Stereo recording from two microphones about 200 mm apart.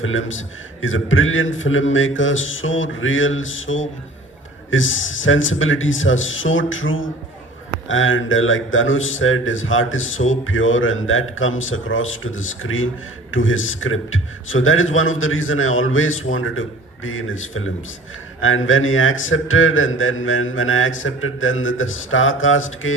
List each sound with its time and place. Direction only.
0.0 s a man's voice: 75° left (ahead or behind)